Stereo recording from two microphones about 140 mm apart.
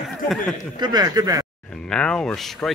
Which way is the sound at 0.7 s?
30° right (ahead or behind).